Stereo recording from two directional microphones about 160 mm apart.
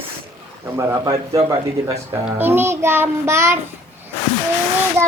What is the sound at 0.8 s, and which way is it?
A man's voice, 20° right (ahead or behind).